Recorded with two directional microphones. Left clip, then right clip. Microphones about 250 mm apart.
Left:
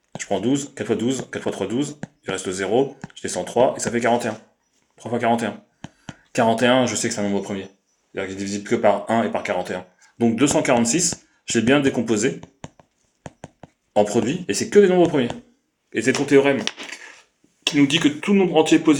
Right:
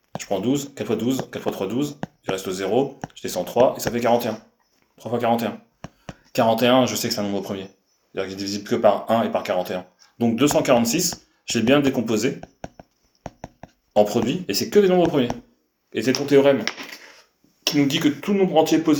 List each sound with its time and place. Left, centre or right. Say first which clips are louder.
0.2 s speech: left 1 dB; left
13.2 s a sound: right 2 dB; centre
13.9 s speech: even; left
17.6 s speech: left 2 dB; left